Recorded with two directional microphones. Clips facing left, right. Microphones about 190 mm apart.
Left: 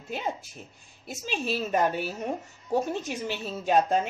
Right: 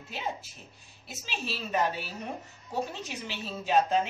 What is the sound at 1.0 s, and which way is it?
A woman's voice, 50° left (ahead or behind).